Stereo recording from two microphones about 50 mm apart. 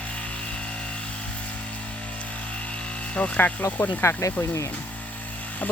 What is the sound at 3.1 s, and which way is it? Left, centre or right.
Speech, left.